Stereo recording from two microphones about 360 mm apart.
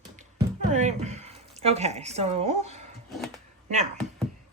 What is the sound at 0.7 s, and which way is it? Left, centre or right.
A woman's voice, centre.